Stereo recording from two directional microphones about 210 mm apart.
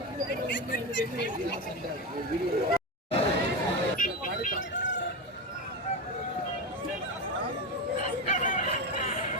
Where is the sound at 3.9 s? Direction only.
40° left (ahead or behind).